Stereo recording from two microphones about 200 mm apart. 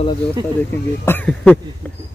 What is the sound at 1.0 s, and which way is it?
Speech, 10° left (ahead or behind).